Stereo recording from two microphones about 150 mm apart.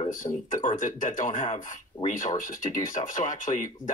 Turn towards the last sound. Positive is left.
turn(degrees=60)  # may be behind; listen again after turning